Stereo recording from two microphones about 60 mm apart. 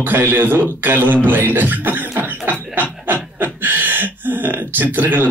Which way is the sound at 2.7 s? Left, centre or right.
Right.